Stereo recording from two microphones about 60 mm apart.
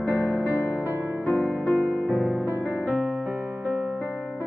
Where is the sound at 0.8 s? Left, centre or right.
Right.